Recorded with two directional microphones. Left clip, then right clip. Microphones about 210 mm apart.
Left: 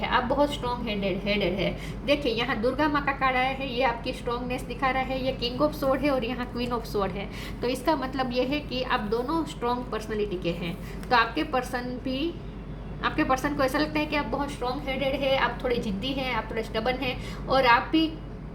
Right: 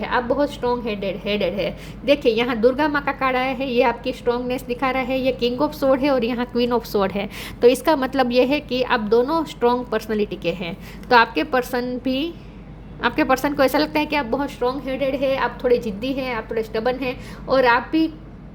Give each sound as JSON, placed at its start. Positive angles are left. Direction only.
{"t": 0.0, "sound": "a woman's voice", "side_deg": -45}